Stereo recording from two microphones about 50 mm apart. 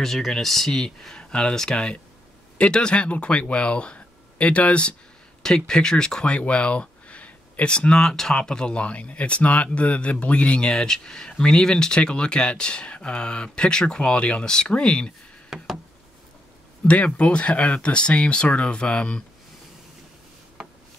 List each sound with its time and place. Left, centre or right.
0.0 s speech: centre; by 4.9 s left
5.4 s speech: centre; by 7.7 s left
7.7 s speech: centre
15.5 s a sound: centre
16.8 s speech: left